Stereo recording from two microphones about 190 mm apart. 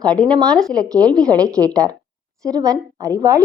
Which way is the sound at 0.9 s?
20° right (ahead or behind).